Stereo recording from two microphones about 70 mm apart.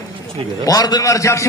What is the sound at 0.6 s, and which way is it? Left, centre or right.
Speech, left.